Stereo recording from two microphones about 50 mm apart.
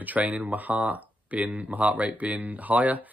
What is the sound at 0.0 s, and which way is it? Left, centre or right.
Speech, right.